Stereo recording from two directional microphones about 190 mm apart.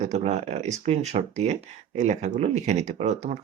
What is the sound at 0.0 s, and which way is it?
Speech, 35° right (ahead or behind).